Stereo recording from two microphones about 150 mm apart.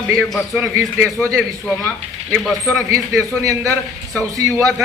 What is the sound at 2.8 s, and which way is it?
A man's voice, 20° right (ahead or behind).